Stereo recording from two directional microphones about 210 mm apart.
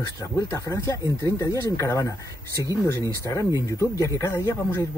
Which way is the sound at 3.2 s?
15° left (ahead or behind).